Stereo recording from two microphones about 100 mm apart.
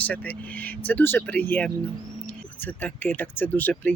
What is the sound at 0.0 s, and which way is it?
Speech, 15° left (ahead or behind).